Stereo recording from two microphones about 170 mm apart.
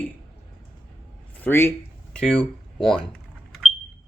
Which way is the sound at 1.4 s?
15° left (ahead or behind).